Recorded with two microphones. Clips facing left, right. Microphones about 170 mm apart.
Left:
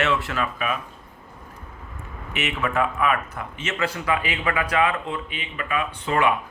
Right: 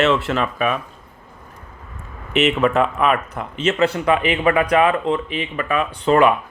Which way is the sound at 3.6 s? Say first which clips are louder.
Right 9 dB; 30° right (ahead or behind).